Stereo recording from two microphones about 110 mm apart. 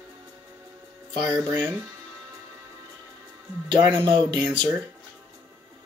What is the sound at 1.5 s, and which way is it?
Speech, 20° right (ahead or behind).